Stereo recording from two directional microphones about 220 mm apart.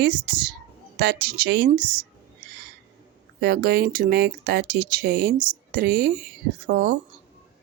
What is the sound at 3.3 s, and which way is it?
Speech, 45° right (ahead or behind).